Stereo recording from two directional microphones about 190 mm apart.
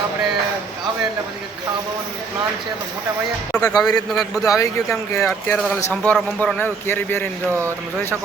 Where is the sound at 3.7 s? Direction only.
5° left (ahead or behind).